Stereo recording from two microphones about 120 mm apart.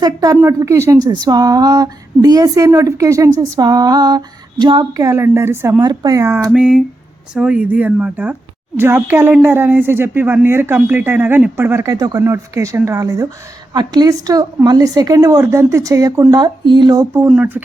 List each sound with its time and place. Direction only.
0.0 s a woman's voice: 30° right (ahead or behind)
5.0 s speech: 20° right (ahead or behind)
5.8 s a woman's voice: 35° right (ahead or behind)
6.5 s a sound: 5° right (ahead or behind)
7.3 s speech: 10° right (ahead or behind); by 12.2 s 35° right (ahead or behind)
12.2 s a woman's voice: 20° right (ahead or behind)
16.3 s a woman's voice: 40° right (ahead or behind)
17.2 s a sound: 5° right (ahead or behind)